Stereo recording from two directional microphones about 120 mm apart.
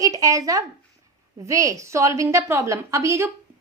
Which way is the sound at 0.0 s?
30° right (ahead or behind).